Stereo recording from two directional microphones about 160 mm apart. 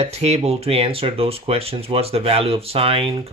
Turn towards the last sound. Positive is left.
turn(degrees=-35)  # may be behind; listen again after turning